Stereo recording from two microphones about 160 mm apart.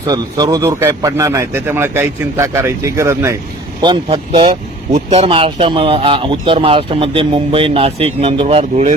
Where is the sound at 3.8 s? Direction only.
30° right (ahead or behind).